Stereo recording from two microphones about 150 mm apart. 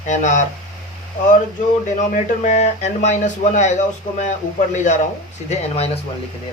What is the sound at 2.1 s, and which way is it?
Speech, 50° left (ahead or behind).